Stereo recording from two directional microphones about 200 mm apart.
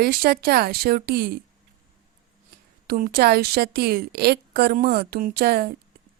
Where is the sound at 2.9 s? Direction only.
50° right (ahead or behind).